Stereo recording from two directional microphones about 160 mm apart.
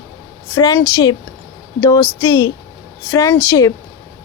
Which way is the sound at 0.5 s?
20° left (ahead or behind).